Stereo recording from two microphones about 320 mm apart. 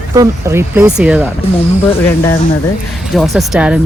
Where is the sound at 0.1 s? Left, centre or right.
Centre.